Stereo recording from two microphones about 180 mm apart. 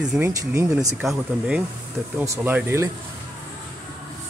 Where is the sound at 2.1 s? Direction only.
15° right (ahead or behind).